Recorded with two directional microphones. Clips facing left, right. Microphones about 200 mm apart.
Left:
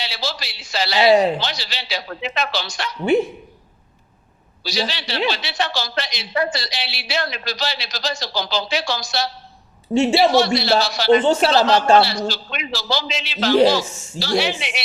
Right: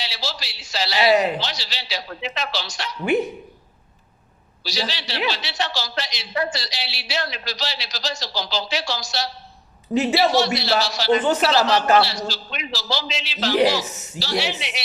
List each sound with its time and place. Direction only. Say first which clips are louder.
0.0 s a man's voice: left 3 dB; 55° left (ahead or behind)
0.9 s speech: left 4 dB; 25° left (ahead or behind)
1.4 s a man's voice: left 3 dB; 55° left (ahead or behind)
4.6 s a man's voice: left 3 dB; 55° left (ahead or behind)
9.9 s speech: left 3 dB; 30° left (ahead or behind)
10.3 s a man's voice: left 4 dB; 55° left (ahead or behind)
11.2 s speech: left 3 dB; 25° left (ahead or behind)
12.0 s a man's voice: left 4 dB; 60° left (ahead or behind)
13.8 s speech: right 1 dB; 30° left (ahead or behind)
14.2 s speech: left 4 dB; 55° left (ahead or behind)